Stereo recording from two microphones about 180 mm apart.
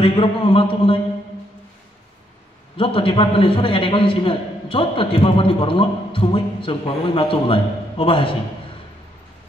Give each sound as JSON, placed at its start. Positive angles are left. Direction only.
{"t": 0.0, "sound": "a man's voice", "side_deg": 30}
{"t": 2.8, "sound": "a man's voice", "side_deg": 30}